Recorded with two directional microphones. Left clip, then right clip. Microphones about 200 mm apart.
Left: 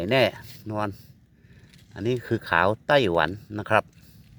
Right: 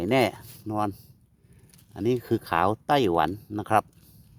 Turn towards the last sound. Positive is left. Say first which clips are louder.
# left 1 dB
turn(degrees=-20)  # may be behind; listen again after turning